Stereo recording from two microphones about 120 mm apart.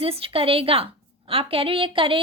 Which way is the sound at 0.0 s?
50° right (ahead or behind).